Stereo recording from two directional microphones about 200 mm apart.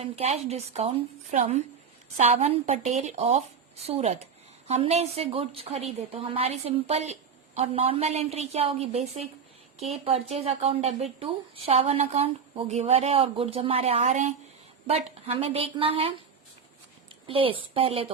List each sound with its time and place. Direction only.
0.0 s a woman's voice: 30° right (ahead or behind)
17.2 s a woman's voice: 25° right (ahead or behind)